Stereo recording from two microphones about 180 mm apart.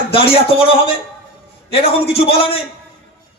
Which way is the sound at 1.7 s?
30° left (ahead or behind).